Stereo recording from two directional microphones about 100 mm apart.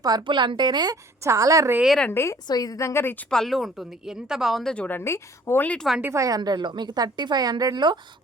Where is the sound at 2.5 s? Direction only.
40° left (ahead or behind); by 3.3 s 20° left (ahead or behind).